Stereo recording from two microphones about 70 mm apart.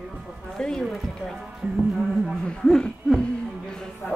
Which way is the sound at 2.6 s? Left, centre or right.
Centre.